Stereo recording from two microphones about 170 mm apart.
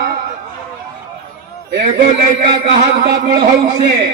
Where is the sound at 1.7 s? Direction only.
70° right (ahead or behind).